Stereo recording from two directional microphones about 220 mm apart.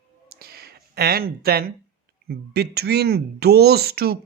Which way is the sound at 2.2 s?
45° right (ahead or behind).